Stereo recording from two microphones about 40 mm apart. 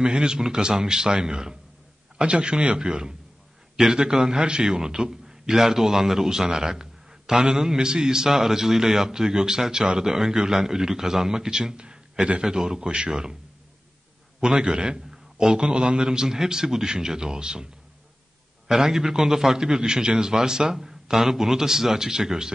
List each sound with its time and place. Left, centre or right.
0.0 s a man's voice: centre
14.4 s a man's voice: right
18.7 s a man's voice: centre